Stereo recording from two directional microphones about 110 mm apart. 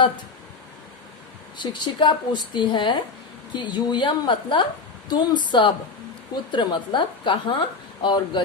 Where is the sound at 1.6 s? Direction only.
45° left (ahead or behind).